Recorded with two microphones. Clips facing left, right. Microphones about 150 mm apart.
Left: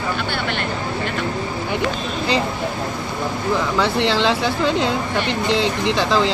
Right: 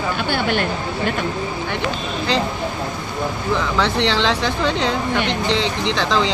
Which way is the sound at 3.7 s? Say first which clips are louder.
Even; 10° left (ahead or behind).